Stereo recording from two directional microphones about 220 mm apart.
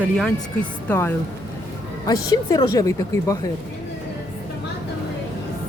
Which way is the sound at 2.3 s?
20° left (ahead or behind).